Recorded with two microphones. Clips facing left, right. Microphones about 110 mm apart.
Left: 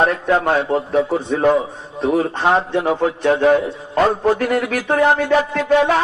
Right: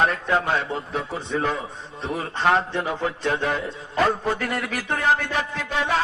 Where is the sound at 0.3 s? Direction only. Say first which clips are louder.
Left 7 dB; 50° left (ahead or behind).